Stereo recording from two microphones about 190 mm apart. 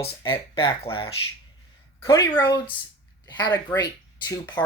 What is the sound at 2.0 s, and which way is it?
Speech, 15° left (ahead or behind).